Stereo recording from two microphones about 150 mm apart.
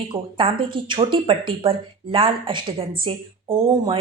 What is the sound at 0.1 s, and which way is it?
A woman's voice, 35° right (ahead or behind).